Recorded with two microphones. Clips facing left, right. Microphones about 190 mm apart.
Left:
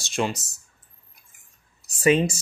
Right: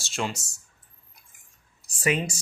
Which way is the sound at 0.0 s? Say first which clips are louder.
Left 5 dB; 15° left (ahead or behind).